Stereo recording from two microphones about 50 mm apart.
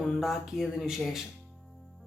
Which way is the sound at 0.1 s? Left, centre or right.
Centre.